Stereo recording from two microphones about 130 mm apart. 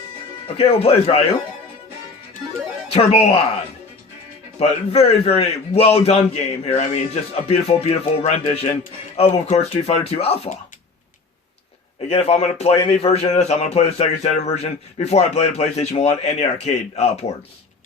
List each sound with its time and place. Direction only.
0.4 s a man's voice: 50° left (ahead or behind)
2.9 s a man's voice: 50° left (ahead or behind)
4.6 s a man's voice: 55° left (ahead or behind)
12.0 s a man's voice: 55° left (ahead or behind)